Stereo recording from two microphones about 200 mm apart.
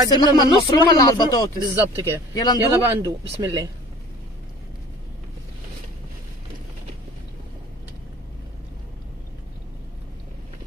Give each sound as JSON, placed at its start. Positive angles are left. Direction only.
{"t": 0.1, "sound": "speech", "side_deg": 20}
{"t": 1.6, "sound": "speech", "side_deg": -10}
{"t": 2.3, "sound": "speech", "side_deg": 20}
{"t": 2.9, "sound": "speech", "side_deg": -15}